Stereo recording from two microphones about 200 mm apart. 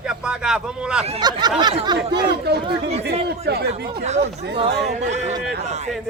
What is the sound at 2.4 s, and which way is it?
A man's voice, 55° right (ahead or behind).